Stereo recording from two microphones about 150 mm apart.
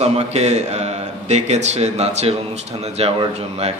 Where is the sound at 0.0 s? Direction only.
45° right (ahead or behind).